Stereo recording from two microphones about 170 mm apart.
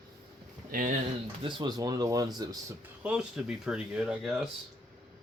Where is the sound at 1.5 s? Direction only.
25° right (ahead or behind).